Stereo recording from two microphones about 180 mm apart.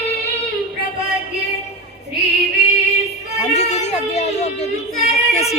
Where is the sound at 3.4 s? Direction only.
35° left (ahead or behind).